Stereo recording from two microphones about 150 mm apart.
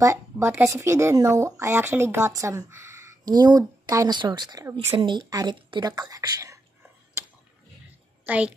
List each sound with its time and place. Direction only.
0.0 s speech: 20° right (ahead or behind)
8.3 s a woman's voice: 10° right (ahead or behind)